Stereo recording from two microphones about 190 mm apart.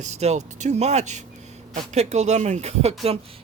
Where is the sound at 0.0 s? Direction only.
35° right (ahead or behind).